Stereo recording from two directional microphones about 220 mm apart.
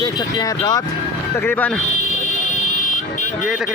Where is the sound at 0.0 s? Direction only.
20° left (ahead or behind).